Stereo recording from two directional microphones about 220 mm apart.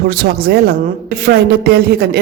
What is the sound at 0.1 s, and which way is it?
Speech, 45° right (ahead or behind).